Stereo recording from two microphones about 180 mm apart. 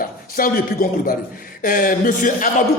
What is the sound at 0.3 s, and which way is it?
A man's voice, 55° left (ahead or behind).